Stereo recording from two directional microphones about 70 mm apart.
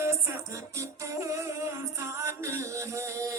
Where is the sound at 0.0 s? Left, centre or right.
Right.